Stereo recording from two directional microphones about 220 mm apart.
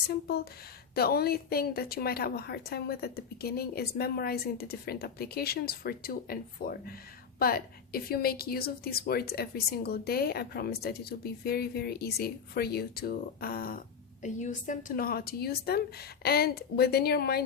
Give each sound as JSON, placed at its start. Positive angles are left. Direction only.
{"t": 0.1, "sound": "a woman's voice", "side_deg": 45}